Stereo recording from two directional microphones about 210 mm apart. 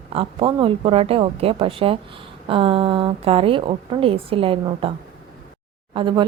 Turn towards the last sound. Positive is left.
turn(degrees=-25)  # may be behind; listen again after turning